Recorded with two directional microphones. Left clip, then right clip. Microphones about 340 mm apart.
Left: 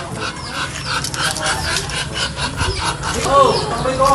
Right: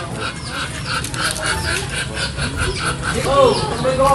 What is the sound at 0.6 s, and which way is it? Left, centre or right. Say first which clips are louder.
Dog: left 2 dB; left.